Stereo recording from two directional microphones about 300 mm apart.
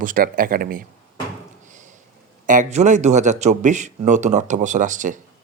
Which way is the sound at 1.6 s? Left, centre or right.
Right.